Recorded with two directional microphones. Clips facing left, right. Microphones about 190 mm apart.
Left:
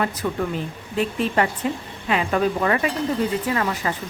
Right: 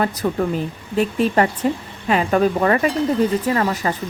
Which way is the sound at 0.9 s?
40° right (ahead or behind).